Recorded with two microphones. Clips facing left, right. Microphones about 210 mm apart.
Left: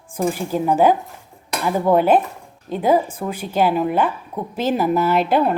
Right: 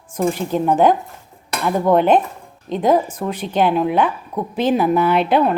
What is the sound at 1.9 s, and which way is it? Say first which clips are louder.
Speech: right 1 dB; 5° left (ahead or behind).